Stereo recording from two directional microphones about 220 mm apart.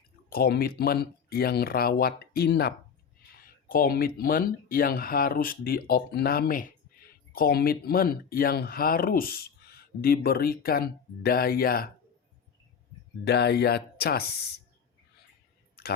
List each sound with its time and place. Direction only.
0.3 s speech: 45° left (ahead or behind)
13.2 s speech: 45° left (ahead or behind)
15.8 s clicking: 45° left (ahead or behind)